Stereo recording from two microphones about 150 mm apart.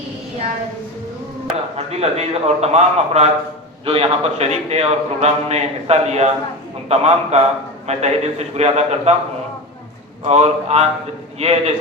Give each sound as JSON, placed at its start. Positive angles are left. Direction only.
{"t": 1.7, "sound": "a man's voice", "side_deg": -45}
{"t": 10.2, "sound": "a man's voice", "side_deg": -45}